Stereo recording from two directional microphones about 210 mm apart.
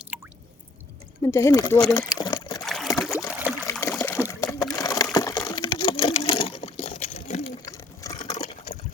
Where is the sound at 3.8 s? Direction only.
10° left (ahead or behind); by 7.5 s 35° left (ahead or behind).